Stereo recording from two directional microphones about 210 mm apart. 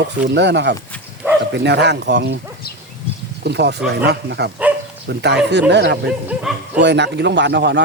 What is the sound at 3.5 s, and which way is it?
Speech, 55° right (ahead or behind).